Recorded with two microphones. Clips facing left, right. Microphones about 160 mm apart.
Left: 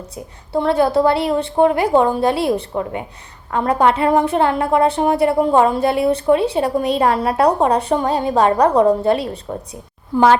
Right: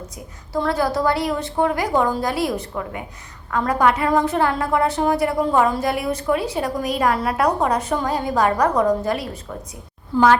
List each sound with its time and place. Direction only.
0.5 s a woman's voice: 25° left (ahead or behind)
10.1 s a woman's voice: 15° left (ahead or behind)